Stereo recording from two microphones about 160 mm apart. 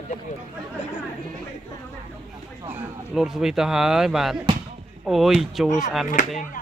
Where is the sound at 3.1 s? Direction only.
5° right (ahead or behind).